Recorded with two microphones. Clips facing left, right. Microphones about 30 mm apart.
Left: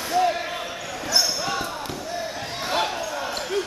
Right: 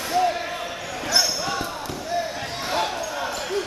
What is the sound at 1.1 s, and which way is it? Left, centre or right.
Basketball bounce, centre.